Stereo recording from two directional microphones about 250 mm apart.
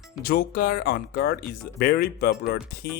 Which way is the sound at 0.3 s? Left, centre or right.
Left.